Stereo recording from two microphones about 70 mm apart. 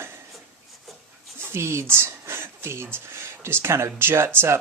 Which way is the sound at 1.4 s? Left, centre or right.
Right.